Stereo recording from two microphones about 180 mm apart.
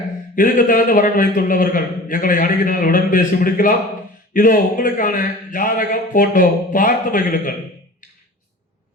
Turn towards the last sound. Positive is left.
turn(degrees=50)  # may be behind; listen again after turning